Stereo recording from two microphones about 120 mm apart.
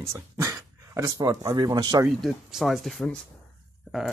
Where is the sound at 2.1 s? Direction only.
Centre (ahead or behind).